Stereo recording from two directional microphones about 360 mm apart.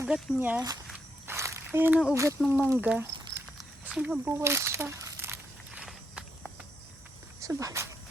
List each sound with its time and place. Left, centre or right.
0.0 s speech: centre
0.9 s a sound: centre
3.8 s crumpling: centre
7.3 s speech: centre